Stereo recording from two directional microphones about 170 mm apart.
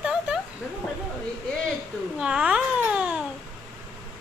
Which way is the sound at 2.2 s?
5° right (ahead or behind).